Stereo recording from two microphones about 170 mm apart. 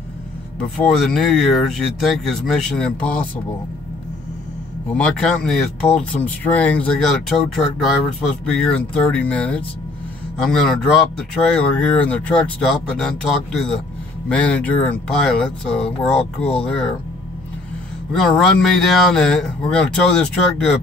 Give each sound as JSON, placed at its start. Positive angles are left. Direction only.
{"t": 0.7, "sound": "speech", "side_deg": 0}
{"t": 4.9, "sound": "speech", "side_deg": 5}
{"t": 18.1, "sound": "speech", "side_deg": 0}